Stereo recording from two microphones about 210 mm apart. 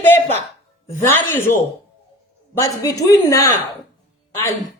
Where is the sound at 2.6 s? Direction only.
15° left (ahead or behind).